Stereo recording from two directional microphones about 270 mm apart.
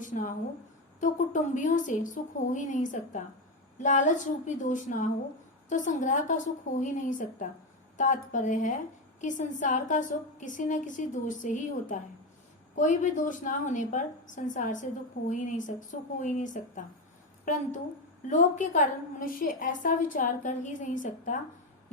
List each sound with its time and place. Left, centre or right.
0.0 s a woman's voice: left